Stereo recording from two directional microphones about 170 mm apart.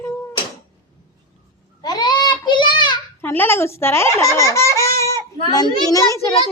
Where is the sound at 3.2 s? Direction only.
10° left (ahead or behind).